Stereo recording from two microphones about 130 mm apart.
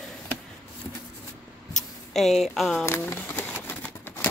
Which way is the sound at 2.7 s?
15° left (ahead or behind).